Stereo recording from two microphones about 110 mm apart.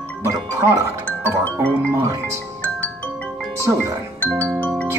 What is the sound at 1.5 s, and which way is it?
Speech, 25° right (ahead or behind).